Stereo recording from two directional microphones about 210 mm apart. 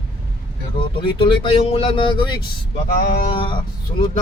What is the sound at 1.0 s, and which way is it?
Speech, 25° left (ahead or behind).